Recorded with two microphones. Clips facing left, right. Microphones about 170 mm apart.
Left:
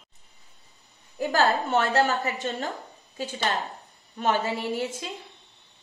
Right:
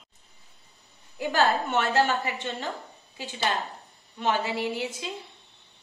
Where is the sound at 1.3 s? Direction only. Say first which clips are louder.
Left 1 dB; 35° left (ahead or behind).